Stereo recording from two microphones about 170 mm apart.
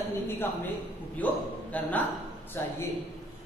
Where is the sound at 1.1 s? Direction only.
10° left (ahead or behind).